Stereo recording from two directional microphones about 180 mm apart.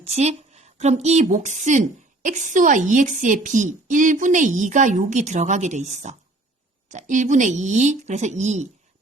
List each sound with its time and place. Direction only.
0.0 s a woman's voice: 35° right (ahead or behind)